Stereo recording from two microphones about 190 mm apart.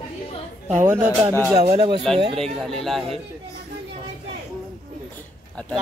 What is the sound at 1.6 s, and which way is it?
Speech, 30° right (ahead or behind).